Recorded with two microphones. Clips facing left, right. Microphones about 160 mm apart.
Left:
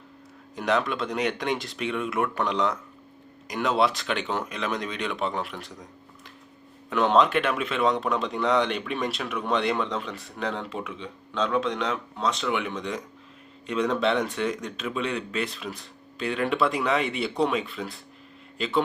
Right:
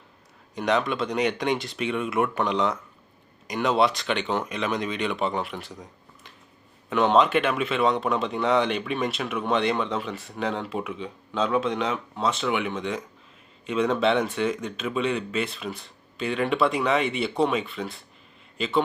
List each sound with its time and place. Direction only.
0.5 s speech: centre (ahead or behind)